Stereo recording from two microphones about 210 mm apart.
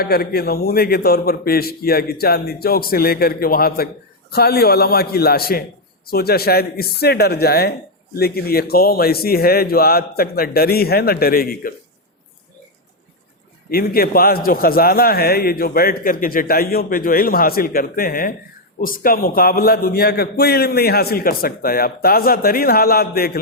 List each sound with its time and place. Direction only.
0.0 s a man's voice: 45° left (ahead or behind)
13.7 s a man's voice: 45° left (ahead or behind)